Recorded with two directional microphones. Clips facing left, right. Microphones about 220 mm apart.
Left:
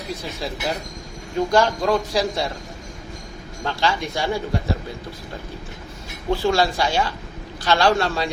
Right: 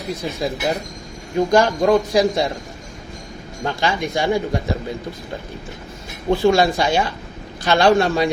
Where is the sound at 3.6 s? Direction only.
15° right (ahead or behind).